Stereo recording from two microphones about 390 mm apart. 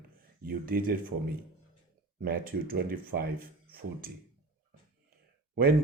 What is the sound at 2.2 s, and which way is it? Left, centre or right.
Speech, right.